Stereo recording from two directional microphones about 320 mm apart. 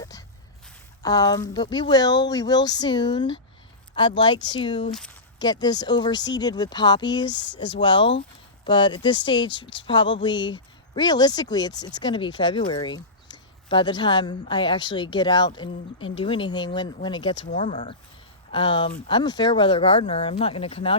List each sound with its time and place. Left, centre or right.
0.0 s a sound: centre
1.0 s speech: centre
4.9 s speech: centre
5.4 s speech: centre